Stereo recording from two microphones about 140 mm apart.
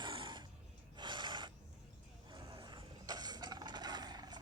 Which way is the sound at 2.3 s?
35° right (ahead or behind).